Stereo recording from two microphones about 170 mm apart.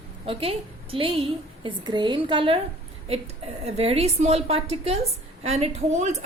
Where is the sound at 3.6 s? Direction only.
35° right (ahead or behind).